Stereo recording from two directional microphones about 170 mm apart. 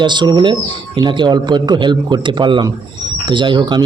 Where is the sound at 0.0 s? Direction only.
25° right (ahead or behind).